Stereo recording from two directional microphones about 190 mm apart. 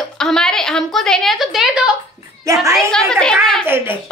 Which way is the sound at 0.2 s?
5° left (ahead or behind).